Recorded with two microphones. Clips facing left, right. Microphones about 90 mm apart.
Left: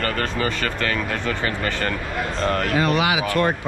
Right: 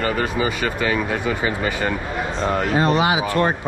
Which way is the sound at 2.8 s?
25° right (ahead or behind).